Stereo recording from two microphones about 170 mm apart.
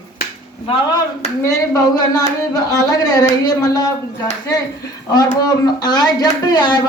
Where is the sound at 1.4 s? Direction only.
20° left (ahead or behind).